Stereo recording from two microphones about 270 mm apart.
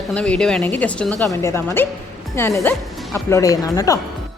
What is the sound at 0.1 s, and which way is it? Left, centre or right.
A woman's voice, centre.